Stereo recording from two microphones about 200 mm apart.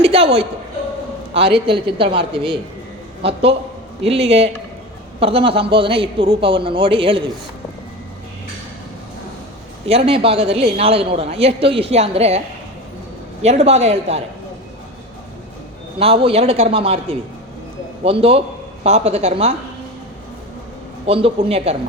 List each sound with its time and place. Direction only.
0.0 s a sound: 30° right (ahead or behind)
1.3 s a man's voice: 30° right (ahead or behind)
4.0 s a man's voice: 30° right (ahead or behind)
9.8 s a man's voice: 30° right (ahead or behind)
13.4 s speech: 35° right (ahead or behind)
16.0 s a man's voice: 30° right (ahead or behind)
21.1 s a man's voice: 30° right (ahead or behind)